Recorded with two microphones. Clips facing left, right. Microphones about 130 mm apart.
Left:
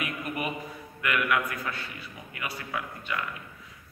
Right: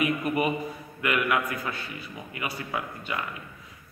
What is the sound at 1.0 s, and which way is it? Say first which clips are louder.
Mantra: right 2 dB; 20° right (ahead or behind).